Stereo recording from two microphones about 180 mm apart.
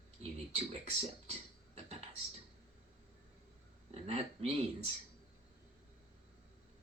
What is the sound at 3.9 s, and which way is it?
Speech, 35° right (ahead or behind).